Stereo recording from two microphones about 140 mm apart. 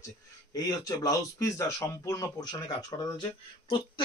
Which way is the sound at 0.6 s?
25° left (ahead or behind).